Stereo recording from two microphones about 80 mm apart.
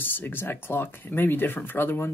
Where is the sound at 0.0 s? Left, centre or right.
Left.